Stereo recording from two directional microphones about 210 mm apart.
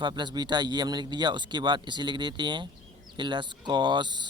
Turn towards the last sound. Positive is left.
turn(degrees=-20)  # may be behind; listen again after turning